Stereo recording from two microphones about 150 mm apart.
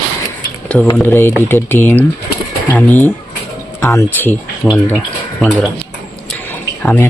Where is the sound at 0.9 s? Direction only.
15° left (ahead or behind).